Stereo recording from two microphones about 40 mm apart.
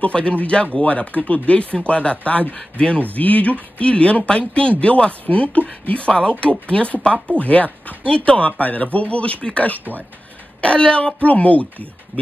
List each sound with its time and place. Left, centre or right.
0.0 s speech: left
11.2 s speech: left